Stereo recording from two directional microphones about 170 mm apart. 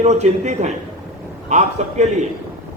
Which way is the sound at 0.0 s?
40° right (ahead or behind).